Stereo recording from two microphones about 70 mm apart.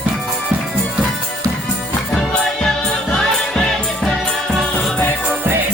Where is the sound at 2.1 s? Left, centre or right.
Centre.